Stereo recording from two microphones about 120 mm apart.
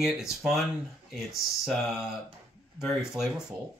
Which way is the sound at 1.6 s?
Centre (ahead or behind).